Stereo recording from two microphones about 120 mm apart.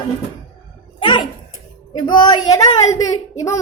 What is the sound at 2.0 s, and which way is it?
Speech, 40° left (ahead or behind).